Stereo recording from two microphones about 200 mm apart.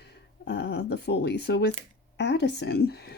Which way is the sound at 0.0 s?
55° left (ahead or behind).